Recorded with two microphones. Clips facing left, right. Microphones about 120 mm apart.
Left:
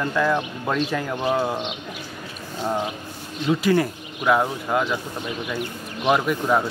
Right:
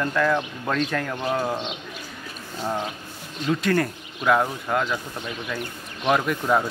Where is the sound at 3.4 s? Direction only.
5° left (ahead or behind).